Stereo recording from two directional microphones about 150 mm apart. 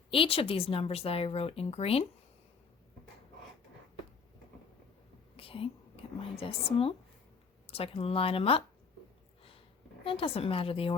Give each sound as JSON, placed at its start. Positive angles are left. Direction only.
{"t": 0.1, "sound": "speech", "side_deg": 40}
{"t": 5.4, "sound": "whispering", "side_deg": 40}
{"t": 6.3, "sound": "speech", "side_deg": 40}
{"t": 10.0, "sound": "speech", "side_deg": 35}